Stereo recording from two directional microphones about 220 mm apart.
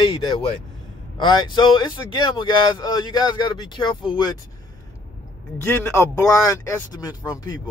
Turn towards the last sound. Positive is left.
turn(degrees=15)  # may be behind; listen again after turning